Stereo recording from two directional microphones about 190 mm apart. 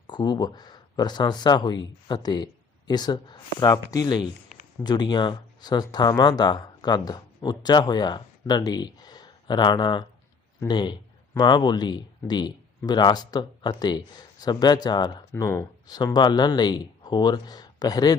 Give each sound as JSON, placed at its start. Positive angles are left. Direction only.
{"t": 0.1, "sound": "speech", "side_deg": 20}